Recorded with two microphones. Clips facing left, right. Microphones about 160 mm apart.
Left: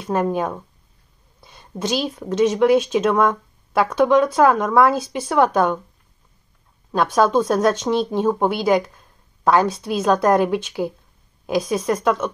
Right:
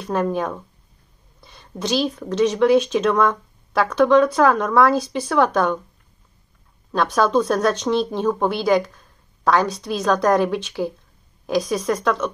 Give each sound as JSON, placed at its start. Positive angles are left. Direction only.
{"t": 0.0, "sound": "a woman's voice", "side_deg": 5}
{"t": 6.9, "sound": "a woman's voice", "side_deg": 5}